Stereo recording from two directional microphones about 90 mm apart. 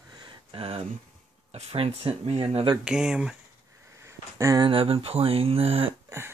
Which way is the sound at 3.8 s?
30° right (ahead or behind).